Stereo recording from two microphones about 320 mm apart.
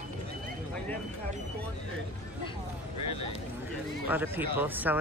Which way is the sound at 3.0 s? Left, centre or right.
Centre.